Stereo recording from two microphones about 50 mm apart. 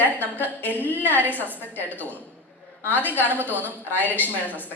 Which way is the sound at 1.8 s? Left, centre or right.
Left.